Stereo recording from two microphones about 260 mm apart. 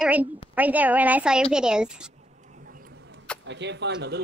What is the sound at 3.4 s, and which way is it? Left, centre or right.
Speech, right.